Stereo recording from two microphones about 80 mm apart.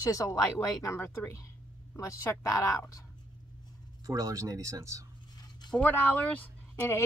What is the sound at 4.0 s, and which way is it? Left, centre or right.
Speech, right.